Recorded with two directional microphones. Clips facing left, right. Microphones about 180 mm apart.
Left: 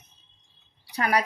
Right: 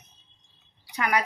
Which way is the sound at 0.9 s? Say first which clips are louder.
Left 1 dB; 35° left (ahead or behind).